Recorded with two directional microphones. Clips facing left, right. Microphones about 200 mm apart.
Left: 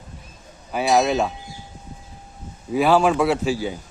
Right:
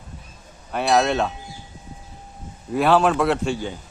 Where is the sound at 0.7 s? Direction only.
5° left (ahead or behind).